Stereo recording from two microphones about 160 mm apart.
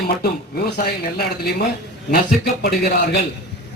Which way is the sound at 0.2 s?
70° left (ahead or behind).